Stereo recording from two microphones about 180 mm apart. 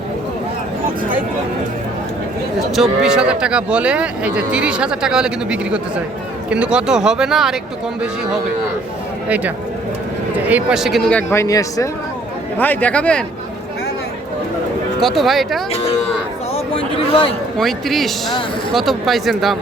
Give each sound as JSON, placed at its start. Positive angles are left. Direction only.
{"t": 2.7, "sound": "speech", "side_deg": 0}
{"t": 10.3, "sound": "speech", "side_deg": -5}
{"t": 15.0, "sound": "speech", "side_deg": 0}
{"t": 16.7, "sound": "a man's voice", "side_deg": 30}
{"t": 17.6, "sound": "speech", "side_deg": 0}